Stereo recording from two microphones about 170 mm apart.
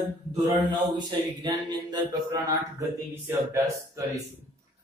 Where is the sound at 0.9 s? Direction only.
25° right (ahead or behind).